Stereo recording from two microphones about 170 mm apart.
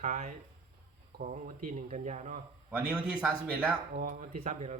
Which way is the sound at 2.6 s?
5° right (ahead or behind).